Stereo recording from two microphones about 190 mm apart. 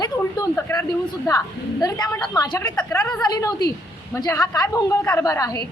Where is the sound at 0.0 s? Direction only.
20° left (ahead or behind).